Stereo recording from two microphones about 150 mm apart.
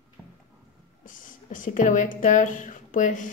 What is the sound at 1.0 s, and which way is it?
Speech, 60° left (ahead or behind).